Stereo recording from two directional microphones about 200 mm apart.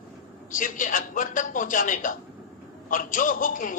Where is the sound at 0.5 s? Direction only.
40° left (ahead or behind).